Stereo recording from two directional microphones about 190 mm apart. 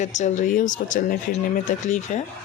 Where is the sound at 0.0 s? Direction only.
40° left (ahead or behind).